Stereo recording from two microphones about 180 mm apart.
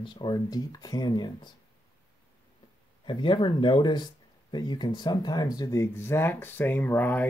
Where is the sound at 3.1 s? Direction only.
25° left (ahead or behind).